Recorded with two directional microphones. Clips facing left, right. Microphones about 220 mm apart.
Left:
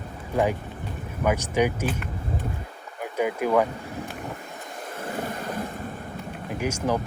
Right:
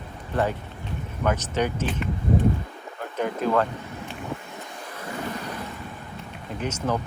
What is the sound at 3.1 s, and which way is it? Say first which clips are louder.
Speech: left 1 dB; 10° left (ahead or behind).